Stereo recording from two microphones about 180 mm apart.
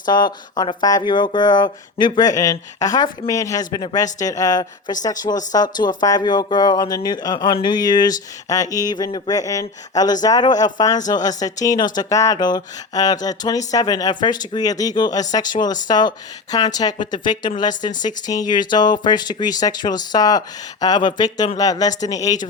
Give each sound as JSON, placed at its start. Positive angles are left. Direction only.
{"t": 0.0, "sound": "speech", "side_deg": 25}